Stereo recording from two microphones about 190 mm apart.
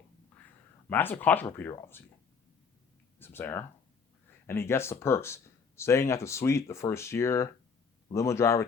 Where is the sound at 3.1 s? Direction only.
10° left (ahead or behind).